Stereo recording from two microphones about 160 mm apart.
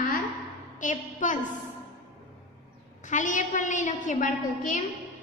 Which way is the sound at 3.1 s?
50° left (ahead or behind).